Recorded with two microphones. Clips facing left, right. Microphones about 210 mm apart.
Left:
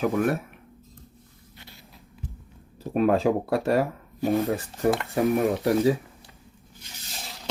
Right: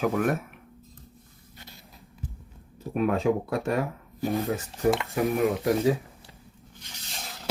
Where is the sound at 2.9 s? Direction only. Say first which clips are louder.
Left 3 dB; 30° left (ahead or behind).